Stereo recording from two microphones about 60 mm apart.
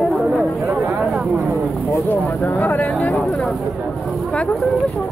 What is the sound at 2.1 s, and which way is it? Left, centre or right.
Speech, left.